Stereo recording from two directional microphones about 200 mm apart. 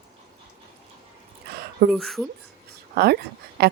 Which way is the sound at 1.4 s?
55° right (ahead or behind).